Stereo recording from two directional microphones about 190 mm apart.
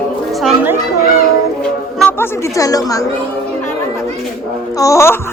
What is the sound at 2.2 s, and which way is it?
Speech, 15° left (ahead or behind).